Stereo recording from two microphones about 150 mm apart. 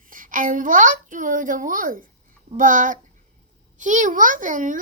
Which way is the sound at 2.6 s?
60° right (ahead or behind).